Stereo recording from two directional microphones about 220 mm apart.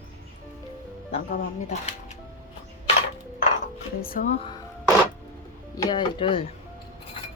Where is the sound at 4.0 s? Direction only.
40° left (ahead or behind).